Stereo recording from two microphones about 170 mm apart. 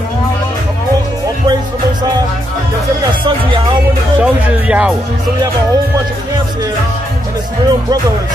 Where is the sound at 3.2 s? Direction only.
30° right (ahead or behind).